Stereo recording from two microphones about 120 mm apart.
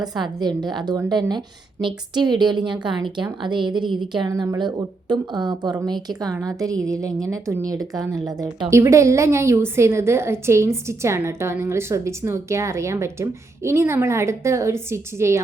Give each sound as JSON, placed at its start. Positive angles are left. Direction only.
{"t": 0.0, "sound": "a woman's voice", "side_deg": -35}
{"t": 4.3, "sound": "a woman's voice", "side_deg": -30}